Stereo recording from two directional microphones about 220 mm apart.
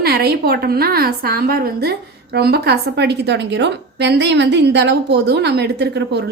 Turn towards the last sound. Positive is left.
turn(degrees=-50)  # may be behind; listen again after turning